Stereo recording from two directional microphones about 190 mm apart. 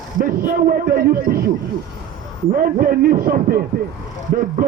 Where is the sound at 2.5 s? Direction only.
50° right (ahead or behind).